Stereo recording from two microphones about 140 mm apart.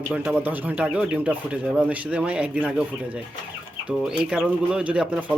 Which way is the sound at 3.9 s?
5° right (ahead or behind).